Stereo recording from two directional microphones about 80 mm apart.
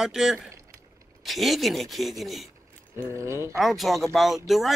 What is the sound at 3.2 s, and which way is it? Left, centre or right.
Speech, right.